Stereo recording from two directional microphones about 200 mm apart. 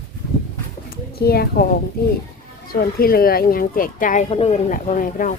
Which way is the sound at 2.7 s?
50° left (ahead or behind).